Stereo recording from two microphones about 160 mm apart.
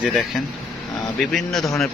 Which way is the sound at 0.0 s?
Centre (ahead or behind).